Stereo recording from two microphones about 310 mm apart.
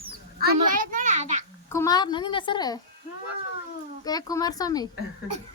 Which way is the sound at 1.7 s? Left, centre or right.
Centre.